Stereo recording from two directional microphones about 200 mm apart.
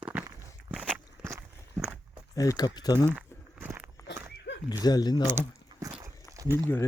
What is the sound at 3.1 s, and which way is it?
Walk, 10° right (ahead or behind).